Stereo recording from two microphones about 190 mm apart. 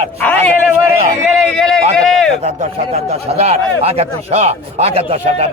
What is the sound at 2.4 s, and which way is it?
Speech, 35° right (ahead or behind).